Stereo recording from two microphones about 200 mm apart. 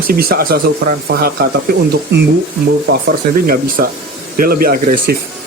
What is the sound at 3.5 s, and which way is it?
Speech, 45° right (ahead or behind).